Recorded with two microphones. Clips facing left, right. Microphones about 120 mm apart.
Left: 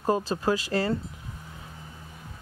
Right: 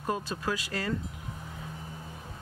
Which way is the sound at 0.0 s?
30° left (ahead or behind).